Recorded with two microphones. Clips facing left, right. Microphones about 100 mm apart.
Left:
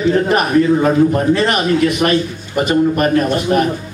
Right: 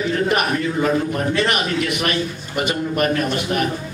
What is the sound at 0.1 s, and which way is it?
A man's voice, 35° left (ahead or behind).